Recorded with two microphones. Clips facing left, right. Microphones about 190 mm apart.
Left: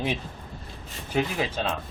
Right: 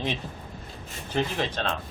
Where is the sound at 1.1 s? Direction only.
10° left (ahead or behind).